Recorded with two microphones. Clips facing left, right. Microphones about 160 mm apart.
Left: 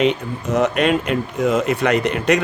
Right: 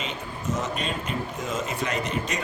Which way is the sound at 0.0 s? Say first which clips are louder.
Left 13 dB; 70° left (ahead or behind).